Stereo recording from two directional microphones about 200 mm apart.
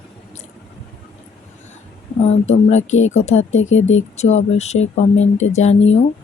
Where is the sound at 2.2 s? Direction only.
35° left (ahead or behind).